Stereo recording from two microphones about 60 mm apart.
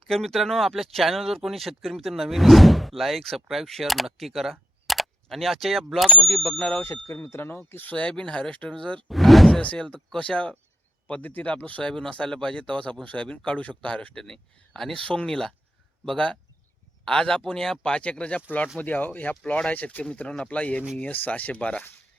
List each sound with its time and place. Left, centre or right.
0.1 s speech: centre
6.8 s speech: left
7.9 s speech: centre
9.0 s speech: centre
9.7 s speech: centre
11.1 s speech: left
11.8 s speech: centre
18.8 s speech: left